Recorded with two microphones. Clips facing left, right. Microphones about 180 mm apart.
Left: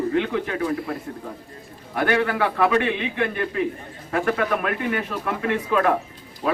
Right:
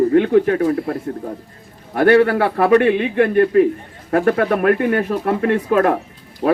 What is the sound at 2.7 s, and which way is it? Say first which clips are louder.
Speech: right 9 dB; 50° right (ahead or behind).